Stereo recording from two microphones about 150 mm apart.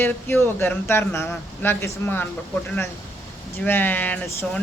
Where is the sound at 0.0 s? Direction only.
15° left (ahead or behind).